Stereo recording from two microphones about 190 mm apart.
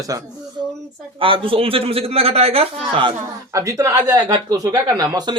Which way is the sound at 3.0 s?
20° right (ahead or behind).